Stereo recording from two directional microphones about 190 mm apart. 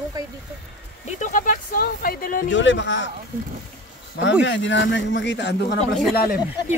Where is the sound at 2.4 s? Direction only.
75° left (ahead or behind).